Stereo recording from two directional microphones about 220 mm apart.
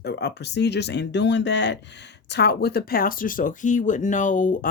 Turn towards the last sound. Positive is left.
turn(degrees=35)  # may be behind; listen again after turning